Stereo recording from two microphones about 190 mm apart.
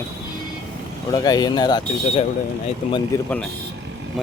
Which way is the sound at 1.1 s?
20° left (ahead or behind).